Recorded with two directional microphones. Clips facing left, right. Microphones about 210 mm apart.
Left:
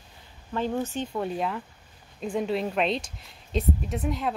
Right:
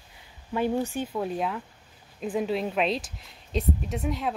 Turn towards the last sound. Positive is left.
turn(degrees=0)  # may be behind; listen again after turning